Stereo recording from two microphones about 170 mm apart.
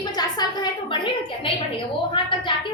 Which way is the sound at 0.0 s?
25° left (ahead or behind).